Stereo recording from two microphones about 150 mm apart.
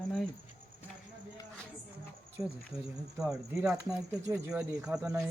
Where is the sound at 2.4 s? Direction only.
20° right (ahead or behind).